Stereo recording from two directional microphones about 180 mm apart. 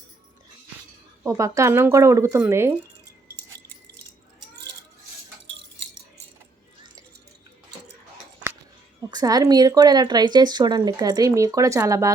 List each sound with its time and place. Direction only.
1.2 s speech: 15° right (ahead or behind)
9.0 s speech: 20° right (ahead or behind)